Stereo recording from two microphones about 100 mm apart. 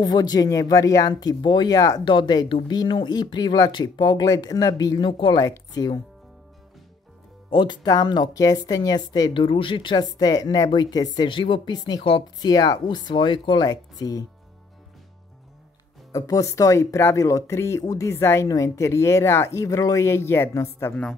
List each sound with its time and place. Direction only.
0.0 s speech: 45° left (ahead or behind)
1.4 s speech: 50° left (ahead or behind)
2.0 s speech: 50° left (ahead or behind)
3.9 s speech: 50° left (ahead or behind)
4.3 s speech: 35° left (ahead or behind)
7.4 s speech: 50° left (ahead or behind)
8.4 s speech: 35° left (ahead or behind)
9.3 s speech: 55° left (ahead or behind)
9.9 s speech: 40° left (ahead or behind)
11.2 s speech: 55° left (ahead or behind)
11.7 s speech: 40° left (ahead or behind)
13.7 s speech: 40° left (ahead or behind)
16.1 s speech: 35° left (ahead or behind)